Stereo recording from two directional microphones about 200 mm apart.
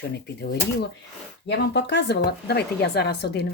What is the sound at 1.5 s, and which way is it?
A woman's voice, 60° left (ahead or behind).